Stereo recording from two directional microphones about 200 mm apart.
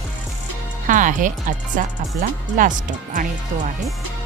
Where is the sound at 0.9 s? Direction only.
40° right (ahead or behind).